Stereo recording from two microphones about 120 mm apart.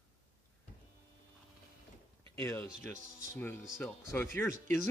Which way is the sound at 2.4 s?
25° left (ahead or behind).